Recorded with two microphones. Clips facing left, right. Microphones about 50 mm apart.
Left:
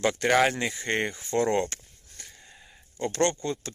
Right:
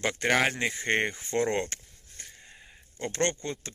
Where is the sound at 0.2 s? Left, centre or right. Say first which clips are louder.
Left 2 dB; centre.